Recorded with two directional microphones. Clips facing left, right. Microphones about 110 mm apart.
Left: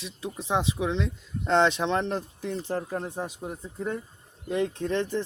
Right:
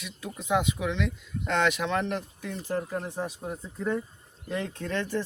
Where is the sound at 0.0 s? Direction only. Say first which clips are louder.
Left 3 dB; 30° left (ahead or behind).